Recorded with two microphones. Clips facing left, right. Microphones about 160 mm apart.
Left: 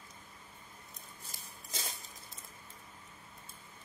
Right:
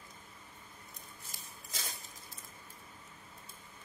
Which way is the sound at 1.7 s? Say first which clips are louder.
Left 2 dB; 25° left (ahead or behind).